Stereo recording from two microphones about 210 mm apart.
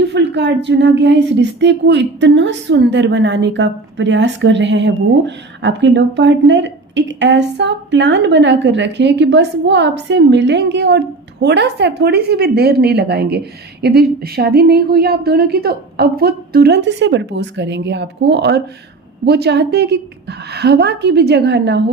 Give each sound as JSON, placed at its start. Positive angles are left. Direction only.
{"t": 0.0, "sound": "a woman's voice", "side_deg": -55}